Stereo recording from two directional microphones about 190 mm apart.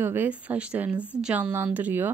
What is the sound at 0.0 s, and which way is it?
A woman's voice, 10° right (ahead or behind).